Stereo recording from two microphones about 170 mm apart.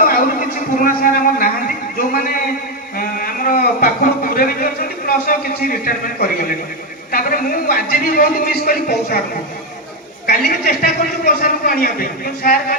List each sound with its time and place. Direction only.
0.0 s a sound: 55° left (ahead or behind)
7.1 s a man's voice: 55° left (ahead or behind)
10.2 s a man's voice: 60° left (ahead or behind)